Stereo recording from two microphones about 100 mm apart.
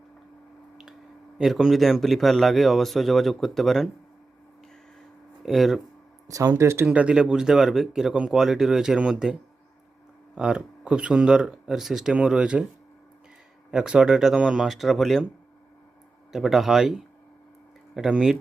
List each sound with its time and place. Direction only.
1.4 s speech: 5° right (ahead or behind)
5.4 s speech: centre (ahead or behind)
6.2 s speech: 35° right (ahead or behind)
6.8 s speech: 10° right (ahead or behind)
13.7 s speech: 5° right (ahead or behind)
16.3 s speech: centre (ahead or behind)